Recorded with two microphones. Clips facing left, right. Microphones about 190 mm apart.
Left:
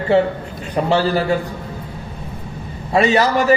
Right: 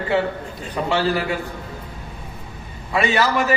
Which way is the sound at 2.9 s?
35° left (ahead or behind).